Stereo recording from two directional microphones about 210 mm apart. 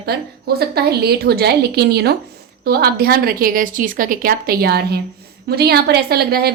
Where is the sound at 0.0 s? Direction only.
50° right (ahead or behind).